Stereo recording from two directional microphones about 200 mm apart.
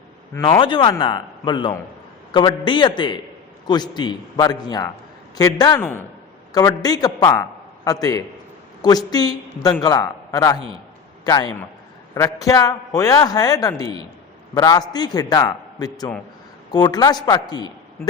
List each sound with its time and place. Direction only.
0.3 s a man's voice: 20° left (ahead or behind)